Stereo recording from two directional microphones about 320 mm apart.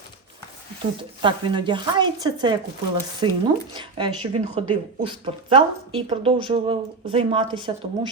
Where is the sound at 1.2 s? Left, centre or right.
Centre.